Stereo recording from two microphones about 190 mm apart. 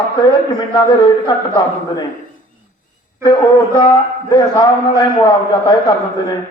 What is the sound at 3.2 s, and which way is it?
A man's voice, 20° left (ahead or behind).